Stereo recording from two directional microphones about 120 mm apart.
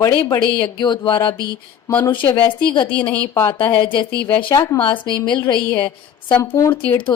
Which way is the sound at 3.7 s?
45° left (ahead or behind).